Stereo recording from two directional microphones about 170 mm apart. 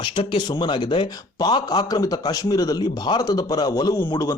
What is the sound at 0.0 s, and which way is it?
Speech, 30° left (ahead or behind).